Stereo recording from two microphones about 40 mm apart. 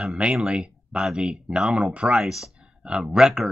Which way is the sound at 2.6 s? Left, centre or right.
Right.